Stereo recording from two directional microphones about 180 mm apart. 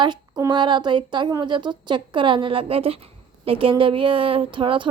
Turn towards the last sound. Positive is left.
turn(degrees=-25)  # may be behind; listen again after turning